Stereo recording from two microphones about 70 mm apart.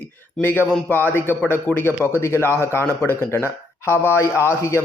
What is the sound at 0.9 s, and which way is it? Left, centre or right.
A man's voice, left.